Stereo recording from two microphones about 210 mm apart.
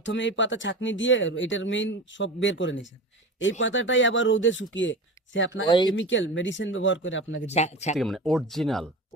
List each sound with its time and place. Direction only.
0.0 s speech: 60° left (ahead or behind)
5.6 s speech: 20° left (ahead or behind)
6.0 s speech: 60° left (ahead or behind)
7.4 s speech: 30° left (ahead or behind)
7.9 s speech: centre (ahead or behind)